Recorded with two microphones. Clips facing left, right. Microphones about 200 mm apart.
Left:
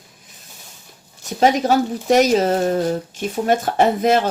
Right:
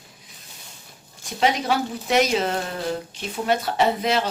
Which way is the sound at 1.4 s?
45° left (ahead or behind).